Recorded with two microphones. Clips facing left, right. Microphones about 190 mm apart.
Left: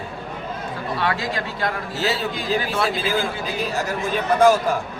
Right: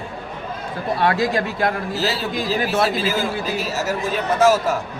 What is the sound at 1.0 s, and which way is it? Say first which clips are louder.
Speech: right 6 dB; 45° right (ahead or behind).